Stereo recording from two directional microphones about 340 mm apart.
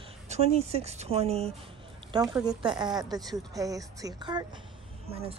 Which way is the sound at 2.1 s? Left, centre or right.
Centre.